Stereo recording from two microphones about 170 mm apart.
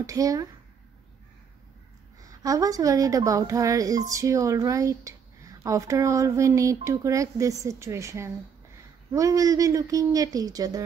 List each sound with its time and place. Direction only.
0.0 s speech: 20° right (ahead or behind)
2.2 s a woman's voice: 20° right (ahead or behind)